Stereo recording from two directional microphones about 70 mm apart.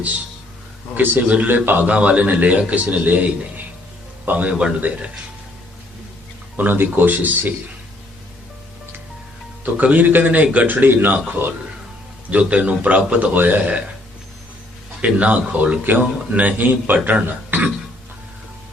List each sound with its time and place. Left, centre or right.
0.9 s a man's voice: right
4.3 s a man's voice: right
6.6 s a man's voice: right
9.7 s a man's voice: right
15.0 s a man's voice: centre